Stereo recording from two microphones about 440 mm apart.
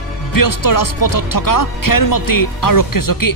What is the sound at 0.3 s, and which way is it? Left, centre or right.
Speech, left.